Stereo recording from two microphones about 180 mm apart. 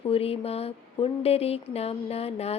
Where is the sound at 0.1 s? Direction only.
35° left (ahead or behind).